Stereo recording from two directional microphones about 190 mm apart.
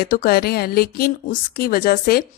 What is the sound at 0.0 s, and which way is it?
A woman's voice, 50° left (ahead or behind).